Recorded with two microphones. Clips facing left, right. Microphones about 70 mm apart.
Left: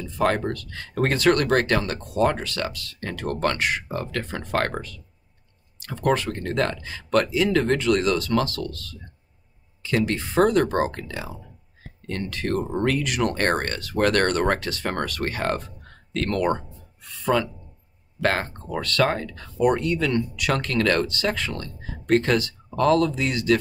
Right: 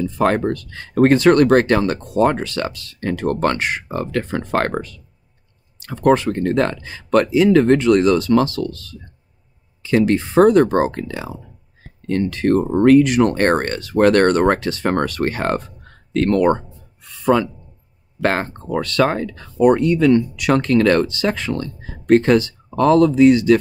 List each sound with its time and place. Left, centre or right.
0.4 s speech: right
9.8 s speech: right
17.2 s a man's voice: centre